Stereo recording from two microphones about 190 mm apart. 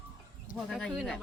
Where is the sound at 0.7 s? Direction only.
Centre (ahead or behind).